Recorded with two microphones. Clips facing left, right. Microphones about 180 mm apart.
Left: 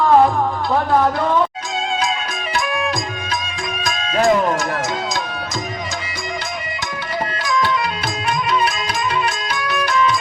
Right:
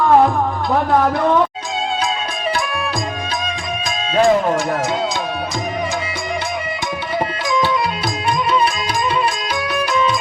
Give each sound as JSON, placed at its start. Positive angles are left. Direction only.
{"t": 3.8, "sound": "speech", "side_deg": -30}